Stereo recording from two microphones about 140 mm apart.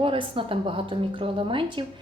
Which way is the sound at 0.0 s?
40° right (ahead or behind).